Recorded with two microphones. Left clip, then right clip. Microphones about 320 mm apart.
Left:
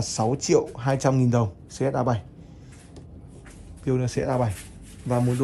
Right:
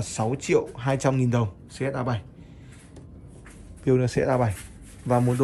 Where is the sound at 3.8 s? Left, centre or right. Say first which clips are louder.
Right 4 dB; centre.